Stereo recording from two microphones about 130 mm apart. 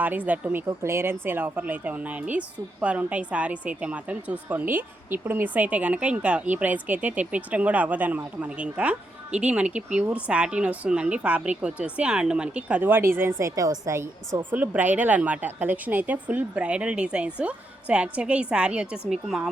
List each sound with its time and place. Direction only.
0.0 s a woman's voice: 10° right (ahead or behind)